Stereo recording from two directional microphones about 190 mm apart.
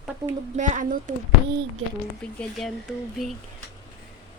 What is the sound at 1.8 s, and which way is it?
Speech, 90° right.